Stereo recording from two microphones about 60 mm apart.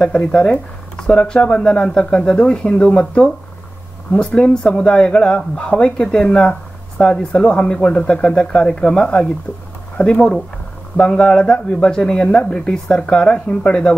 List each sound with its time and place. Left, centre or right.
0.0 s speech: centre
4.4 s speech: centre